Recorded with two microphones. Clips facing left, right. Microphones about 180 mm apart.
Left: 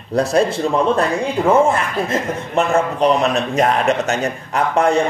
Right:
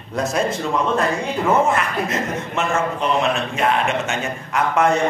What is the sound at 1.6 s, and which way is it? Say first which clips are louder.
A man's voice: left 2 dB; 30° left (ahead or behind).